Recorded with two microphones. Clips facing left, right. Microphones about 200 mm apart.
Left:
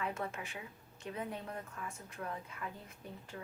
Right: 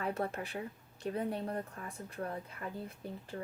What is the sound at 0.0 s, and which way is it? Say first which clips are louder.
A woman's voice: right 4 dB; 35° right (ahead or behind).